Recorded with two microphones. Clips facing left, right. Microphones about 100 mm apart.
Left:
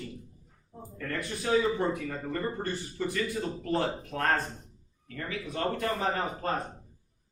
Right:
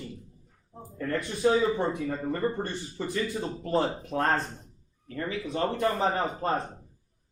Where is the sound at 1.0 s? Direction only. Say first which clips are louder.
Right 7 dB; 25° right (ahead or behind).